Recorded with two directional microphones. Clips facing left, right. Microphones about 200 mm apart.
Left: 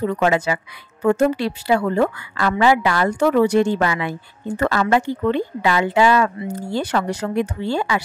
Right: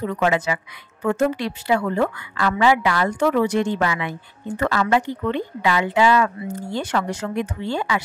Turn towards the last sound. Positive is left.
turn(degrees=35)  # may be behind; listen again after turning